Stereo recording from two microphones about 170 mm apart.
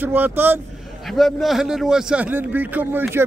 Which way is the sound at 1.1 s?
Centre (ahead or behind).